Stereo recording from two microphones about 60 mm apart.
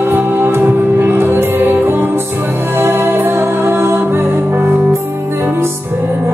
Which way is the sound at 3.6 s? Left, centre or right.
Right.